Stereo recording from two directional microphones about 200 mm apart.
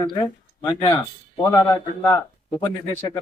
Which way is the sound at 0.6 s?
20° left (ahead or behind).